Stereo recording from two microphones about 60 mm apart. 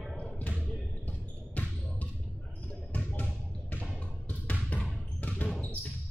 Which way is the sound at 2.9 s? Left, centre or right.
Left.